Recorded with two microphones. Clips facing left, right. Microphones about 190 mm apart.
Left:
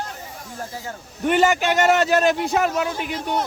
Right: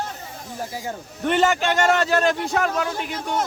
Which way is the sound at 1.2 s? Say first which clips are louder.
Left 1 dB; 10° left (ahead or behind).